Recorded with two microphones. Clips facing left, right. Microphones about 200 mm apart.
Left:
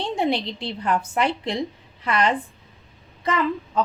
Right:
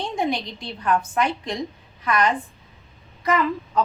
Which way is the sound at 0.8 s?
25° left (ahead or behind).